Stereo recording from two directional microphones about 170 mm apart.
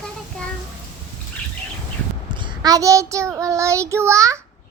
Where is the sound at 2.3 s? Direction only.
25° right (ahead or behind).